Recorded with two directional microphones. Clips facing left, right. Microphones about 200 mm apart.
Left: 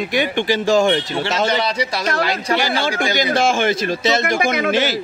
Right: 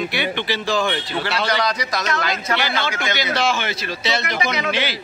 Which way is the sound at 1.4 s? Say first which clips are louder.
Left 2 dB; 30° left (ahead or behind).